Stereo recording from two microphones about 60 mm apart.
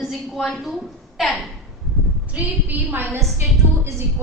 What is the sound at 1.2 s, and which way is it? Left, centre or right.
Speech, centre.